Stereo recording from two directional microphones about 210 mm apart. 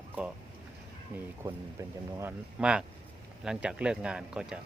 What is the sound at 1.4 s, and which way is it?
Speech, 15° right (ahead or behind).